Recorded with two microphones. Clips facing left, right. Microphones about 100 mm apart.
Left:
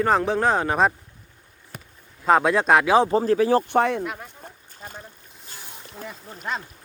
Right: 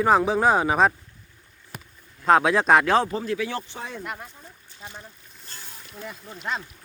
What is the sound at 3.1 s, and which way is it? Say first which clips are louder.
Speech: left 9 dB; 35° left (ahead or behind).